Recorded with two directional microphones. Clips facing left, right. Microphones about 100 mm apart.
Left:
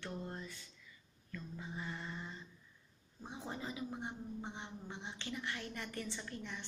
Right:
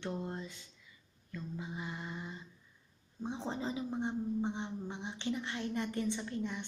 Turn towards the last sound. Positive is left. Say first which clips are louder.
# right 8 dB
turn(degrees=-20)  # may be behind; listen again after turning